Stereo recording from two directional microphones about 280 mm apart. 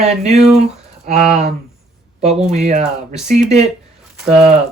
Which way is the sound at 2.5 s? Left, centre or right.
Right.